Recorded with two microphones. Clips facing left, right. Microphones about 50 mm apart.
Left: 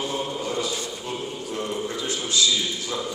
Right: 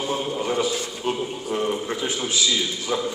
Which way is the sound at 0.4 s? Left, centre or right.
Right.